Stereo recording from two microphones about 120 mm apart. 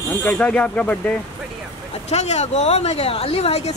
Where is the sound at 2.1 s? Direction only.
70° left (ahead or behind).